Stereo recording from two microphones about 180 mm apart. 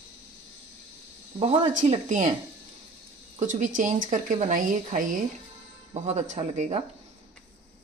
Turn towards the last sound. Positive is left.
turn(degrees=-40)  # may be behind; listen again after turning